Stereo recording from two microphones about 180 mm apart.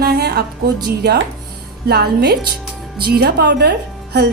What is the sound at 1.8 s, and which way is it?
A woman's voice, 60° right (ahead or behind).